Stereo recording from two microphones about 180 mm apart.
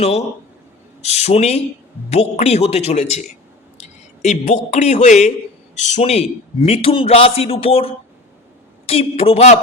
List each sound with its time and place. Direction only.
1.0 s a man's voice: 35° left (ahead or behind)